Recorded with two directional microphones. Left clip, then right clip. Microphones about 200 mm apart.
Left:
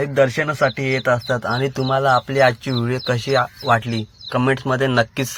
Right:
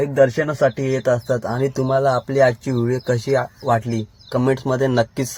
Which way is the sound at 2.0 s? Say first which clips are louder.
Left 2 dB; 20° left (ahead or behind).